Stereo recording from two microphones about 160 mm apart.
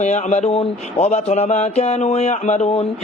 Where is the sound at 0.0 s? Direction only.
45° left (ahead or behind).